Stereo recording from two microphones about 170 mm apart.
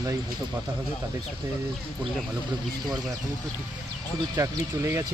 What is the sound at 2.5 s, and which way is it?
Speech, 25° right (ahead or behind).